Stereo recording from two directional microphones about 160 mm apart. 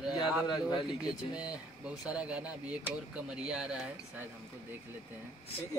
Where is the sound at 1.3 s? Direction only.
5° right (ahead or behind).